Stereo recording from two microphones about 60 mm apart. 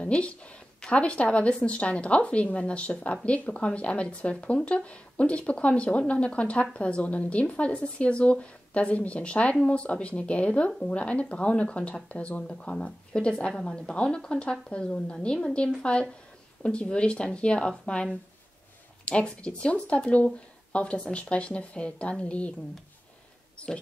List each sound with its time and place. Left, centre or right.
0.0 s a woman's voice: centre
19.0 s speech: centre